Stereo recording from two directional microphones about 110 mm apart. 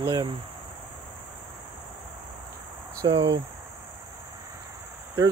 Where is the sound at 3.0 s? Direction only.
40° right (ahead or behind).